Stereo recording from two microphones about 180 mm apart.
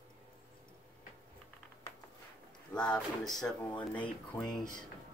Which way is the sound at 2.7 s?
5° left (ahead or behind).